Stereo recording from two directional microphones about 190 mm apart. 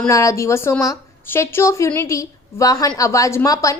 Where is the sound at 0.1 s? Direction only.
15° left (ahead or behind).